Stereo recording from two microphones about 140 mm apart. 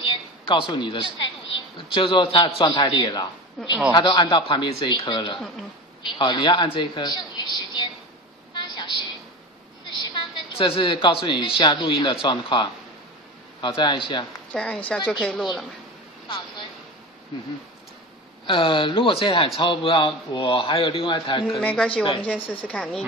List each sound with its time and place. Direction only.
0.0 s a sound: 35° left (ahead or behind)
2.0 s a man's voice: 35° left (ahead or behind)
8.5 s vehicle: 35° left (ahead or behind)
9.9 s a woman's voice: 35° left (ahead or behind)
14.5 s speech: 10° left (ahead or behind)
16.3 s a sound: 35° left (ahead or behind)
18.5 s a man's voice: 35° left (ahead or behind)
21.5 s speech: 5° left (ahead or behind)